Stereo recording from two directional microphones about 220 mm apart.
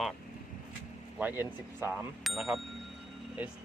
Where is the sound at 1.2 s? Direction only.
10° right (ahead or behind).